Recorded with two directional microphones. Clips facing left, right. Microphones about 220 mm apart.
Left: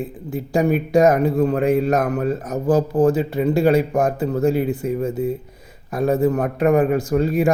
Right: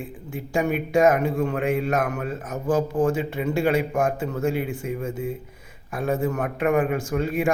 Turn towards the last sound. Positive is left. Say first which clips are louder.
# left 6 dB
turn(degrees=40)  # may be behind; listen again after turning